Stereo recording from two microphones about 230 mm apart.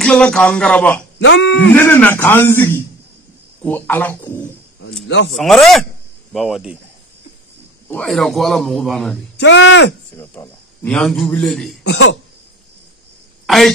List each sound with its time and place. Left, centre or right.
0.0 s a man's voice: centre
1.2 s speech: left
1.8 s a man's voice: centre
5.0 s speech: left
5.3 s a man's voice: centre
7.9 s a man's voice: centre
9.4 s speech: left
10.1 s a man's voice: centre
11.8 s speech: left